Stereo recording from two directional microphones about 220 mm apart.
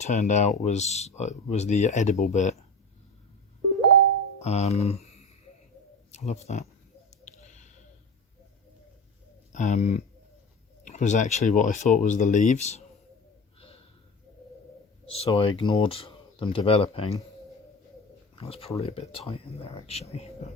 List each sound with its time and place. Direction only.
0.0 s speech: 35° left (ahead or behind)
4.4 s speech: 30° left (ahead or behind)
9.5 s speech: 35° left (ahead or behind)
15.1 s speech: 25° left (ahead or behind)
18.3 s speech: 25° left (ahead or behind)